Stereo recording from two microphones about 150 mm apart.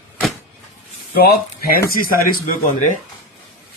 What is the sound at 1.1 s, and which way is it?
Speech, 90° left.